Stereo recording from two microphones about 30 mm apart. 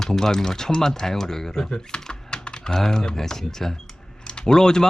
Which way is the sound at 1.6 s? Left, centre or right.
Left.